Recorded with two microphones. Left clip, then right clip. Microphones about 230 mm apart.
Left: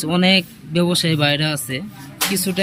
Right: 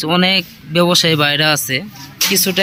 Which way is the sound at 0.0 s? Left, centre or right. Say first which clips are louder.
Right 3 dB; centre.